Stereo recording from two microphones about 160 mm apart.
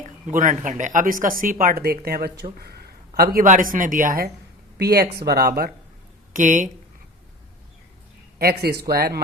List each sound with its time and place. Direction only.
0.3 s speech: 55° right (ahead or behind); by 3.2 s 75° right (ahead or behind)
3.3 s speech: 55° right (ahead or behind)
4.8 s speech: 80° right
6.3 s speech: 55° right (ahead or behind)
8.4 s speech: 80° right